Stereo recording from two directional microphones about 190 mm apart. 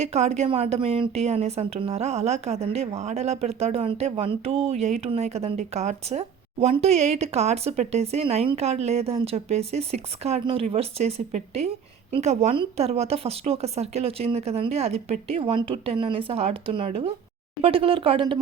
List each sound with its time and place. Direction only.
0.0 s a woman's voice: 35° right (ahead or behind)